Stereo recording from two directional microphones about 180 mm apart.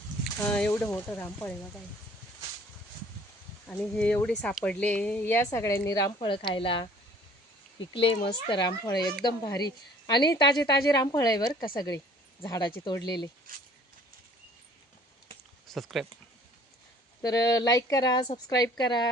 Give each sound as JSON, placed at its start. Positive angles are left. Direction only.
{"t": 0.4, "sound": "speech", "side_deg": 10}
{"t": 3.7, "sound": "speech", "side_deg": 5}
{"t": 6.1, "sound": "a woman's voice", "side_deg": 30}
{"t": 7.9, "sound": "a woman's voice", "side_deg": 30}
{"t": 15.6, "sound": "speech", "side_deg": 0}
{"t": 17.2, "sound": "a woman's voice", "side_deg": 20}